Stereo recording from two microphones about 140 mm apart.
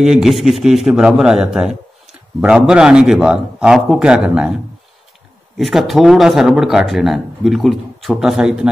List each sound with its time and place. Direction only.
0.0 s speech: 5° right (ahead or behind)
5.6 s speech: centre (ahead or behind)